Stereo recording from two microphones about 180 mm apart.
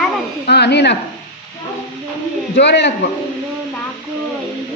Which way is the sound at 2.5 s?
75° left (ahead or behind).